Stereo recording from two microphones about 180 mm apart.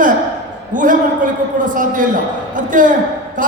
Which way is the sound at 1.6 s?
45° right (ahead or behind).